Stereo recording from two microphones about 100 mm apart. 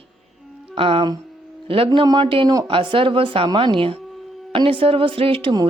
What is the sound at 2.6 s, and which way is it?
Speech, 60° right (ahead or behind).